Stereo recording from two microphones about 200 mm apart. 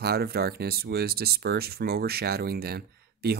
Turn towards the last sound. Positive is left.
turn(degrees=-50)  # may be behind; listen again after turning